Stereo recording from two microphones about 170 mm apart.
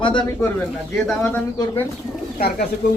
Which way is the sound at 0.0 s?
30° left (ahead or behind).